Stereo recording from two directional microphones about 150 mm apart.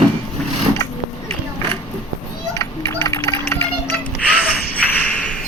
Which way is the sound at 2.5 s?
20° left (ahead or behind).